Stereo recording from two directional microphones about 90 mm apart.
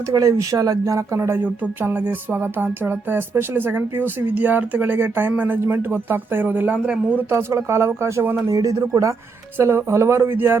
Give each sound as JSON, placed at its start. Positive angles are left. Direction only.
{"t": 0.1, "sound": "speech", "side_deg": -35}
{"t": 1.6, "sound": "speech", "side_deg": -20}
{"t": 7.3, "sound": "speech", "side_deg": -30}
{"t": 8.4, "sound": "speech", "side_deg": -40}
{"t": 9.6, "sound": "speech", "side_deg": -30}